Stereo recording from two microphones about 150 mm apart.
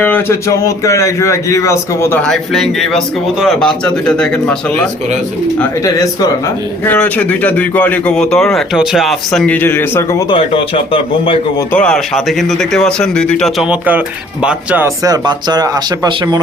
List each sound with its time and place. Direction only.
0.0 s speech: 15° left (ahead or behind)
2.2 s speech: centre (ahead or behind)
5.8 s speech: 20° left (ahead or behind)
6.8 s speech: 10° left (ahead or behind)
9.6 s speech: 15° left (ahead or behind)
10.3 s speech: 35° left (ahead or behind)
11.7 s speech: 5° left (ahead or behind)
13.7 s speech: 10° right (ahead or behind)
14.8 s speech: 25° right (ahead or behind)